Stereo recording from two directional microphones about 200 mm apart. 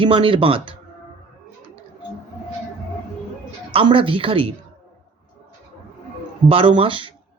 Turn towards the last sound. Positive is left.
turn(degrees=-25)  # may be behind; listen again after turning